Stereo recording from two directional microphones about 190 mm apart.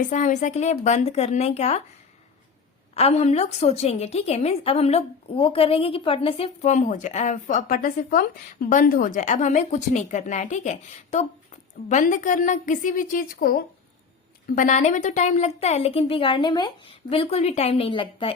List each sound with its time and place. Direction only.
0.0 s a woman's voice: 40° left (ahead or behind)
2.9 s a woman's voice: 35° left (ahead or behind)